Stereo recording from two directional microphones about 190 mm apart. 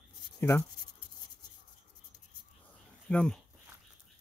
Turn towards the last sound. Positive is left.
turn(degrees=5)  # may be behind; listen again after turning